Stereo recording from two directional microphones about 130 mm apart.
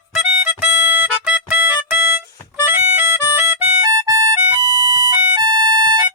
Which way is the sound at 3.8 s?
30° right (ahead or behind).